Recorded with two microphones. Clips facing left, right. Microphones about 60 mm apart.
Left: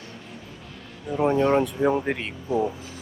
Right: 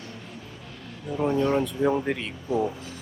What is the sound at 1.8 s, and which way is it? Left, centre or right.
Speech, centre.